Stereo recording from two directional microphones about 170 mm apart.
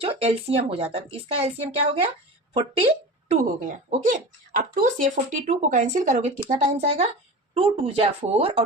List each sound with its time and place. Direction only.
0.0 s speech: 35° right (ahead or behind)
2.5 s speech: 35° right (ahead or behind)